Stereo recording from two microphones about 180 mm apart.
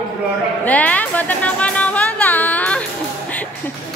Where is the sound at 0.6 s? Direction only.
10° left (ahead or behind).